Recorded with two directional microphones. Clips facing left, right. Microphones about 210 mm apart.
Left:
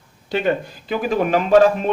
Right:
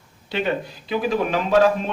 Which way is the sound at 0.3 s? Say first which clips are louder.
Left 4 dB; 45° left (ahead or behind).